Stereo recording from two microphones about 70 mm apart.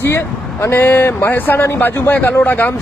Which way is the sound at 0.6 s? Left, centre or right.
Left.